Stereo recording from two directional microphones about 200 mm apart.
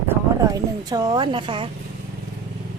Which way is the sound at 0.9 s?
20° right (ahead or behind).